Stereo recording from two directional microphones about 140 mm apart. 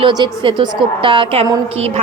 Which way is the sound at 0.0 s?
35° right (ahead or behind).